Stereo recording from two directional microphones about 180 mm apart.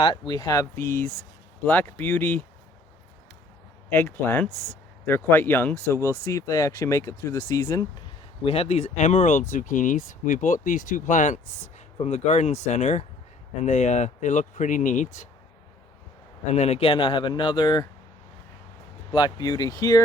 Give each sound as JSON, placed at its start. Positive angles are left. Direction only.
{"t": 0.0, "sound": "speech", "side_deg": 25}
{"t": 3.8, "sound": "speech", "side_deg": 10}
{"t": 8.4, "sound": "speech", "side_deg": 35}
{"t": 16.5, "sound": "speech", "side_deg": 35}
{"t": 19.1, "sound": "speech", "side_deg": 25}